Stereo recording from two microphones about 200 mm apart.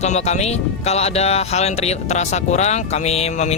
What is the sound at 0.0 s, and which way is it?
Speech, 35° left (ahead or behind).